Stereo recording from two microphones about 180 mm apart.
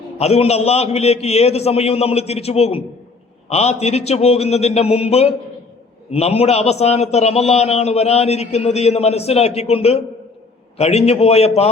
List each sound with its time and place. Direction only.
0.2 s a man's voice: 35° left (ahead or behind)